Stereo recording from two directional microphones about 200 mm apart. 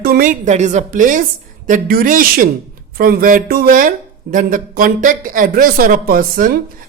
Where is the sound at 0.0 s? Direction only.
45° right (ahead or behind).